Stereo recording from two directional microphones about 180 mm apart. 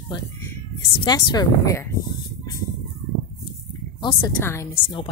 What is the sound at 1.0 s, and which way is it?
Speech, 20° left (ahead or behind).